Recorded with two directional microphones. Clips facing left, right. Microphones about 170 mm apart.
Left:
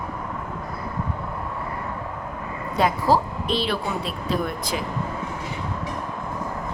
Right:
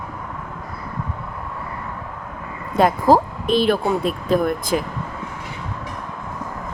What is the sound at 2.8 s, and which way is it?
A woman's voice, 50° right (ahead or behind).